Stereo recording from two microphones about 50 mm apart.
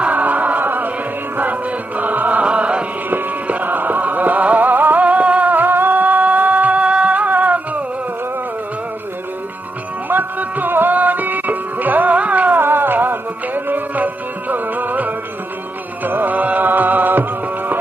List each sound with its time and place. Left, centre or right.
0.0 s music: right
3.4 s music: right
10.1 s music: right
12.5 s music: right